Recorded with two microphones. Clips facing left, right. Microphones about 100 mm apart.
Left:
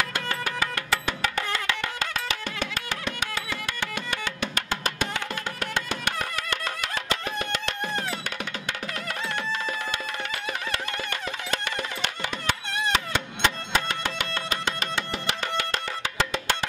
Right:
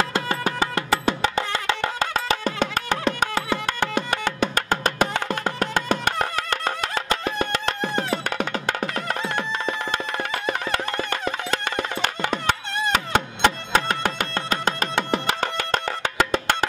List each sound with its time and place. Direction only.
0.0 s music: 30° right (ahead or behind); by 16.5 s 50° right (ahead or behind)